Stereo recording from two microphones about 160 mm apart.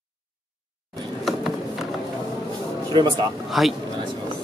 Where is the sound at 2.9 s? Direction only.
30° right (ahead or behind).